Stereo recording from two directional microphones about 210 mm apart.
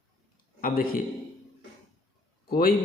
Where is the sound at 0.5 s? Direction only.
40° left (ahead or behind).